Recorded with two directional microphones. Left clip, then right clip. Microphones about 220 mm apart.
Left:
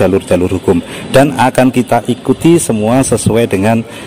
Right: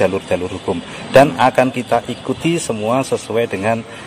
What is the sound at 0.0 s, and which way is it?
Speech, 40° left (ahead or behind).